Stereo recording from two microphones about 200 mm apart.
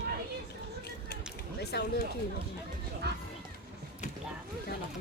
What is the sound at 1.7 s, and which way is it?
Speech, 55° left (ahead or behind).